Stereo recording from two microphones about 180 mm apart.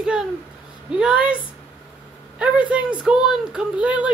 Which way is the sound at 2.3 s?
5° right (ahead or behind).